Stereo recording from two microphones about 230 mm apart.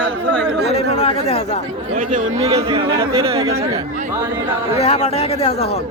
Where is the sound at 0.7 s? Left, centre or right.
Left.